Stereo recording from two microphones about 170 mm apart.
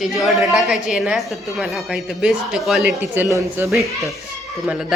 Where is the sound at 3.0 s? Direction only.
15° right (ahead or behind).